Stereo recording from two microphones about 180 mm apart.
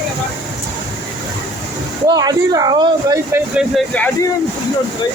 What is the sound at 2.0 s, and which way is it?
Speech, 20° right (ahead or behind).